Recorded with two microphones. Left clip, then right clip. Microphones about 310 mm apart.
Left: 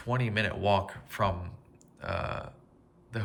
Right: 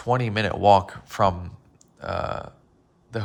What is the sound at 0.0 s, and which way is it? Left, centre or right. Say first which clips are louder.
Speech: right 7 dB; centre.